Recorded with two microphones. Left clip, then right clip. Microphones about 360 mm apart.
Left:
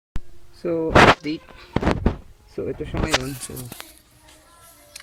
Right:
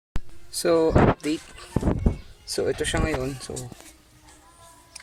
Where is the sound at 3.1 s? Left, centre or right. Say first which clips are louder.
Left 7 dB; left.